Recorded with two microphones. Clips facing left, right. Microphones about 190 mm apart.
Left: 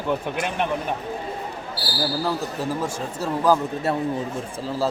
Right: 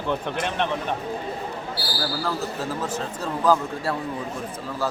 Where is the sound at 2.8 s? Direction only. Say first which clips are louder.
Left 1 dB; 10° left (ahead or behind).